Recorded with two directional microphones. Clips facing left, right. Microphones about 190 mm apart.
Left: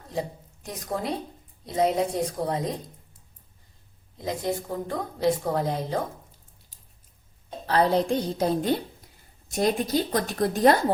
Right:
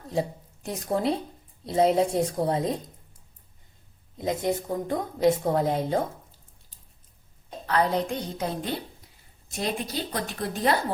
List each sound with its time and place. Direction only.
0.1 s a woman's voice: 25° right (ahead or behind)
4.2 s a woman's voice: 20° right (ahead or behind)
7.7 s a woman's voice: 35° left (ahead or behind)
9.6 s a woman's voice: 45° left (ahead or behind)